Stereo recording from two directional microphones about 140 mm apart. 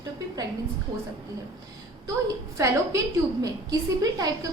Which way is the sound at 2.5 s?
25° right (ahead or behind).